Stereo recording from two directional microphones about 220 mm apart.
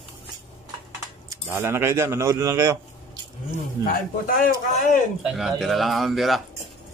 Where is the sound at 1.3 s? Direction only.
10° right (ahead or behind).